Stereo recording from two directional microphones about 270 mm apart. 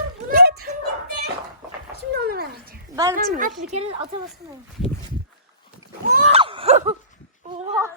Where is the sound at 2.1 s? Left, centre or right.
Right.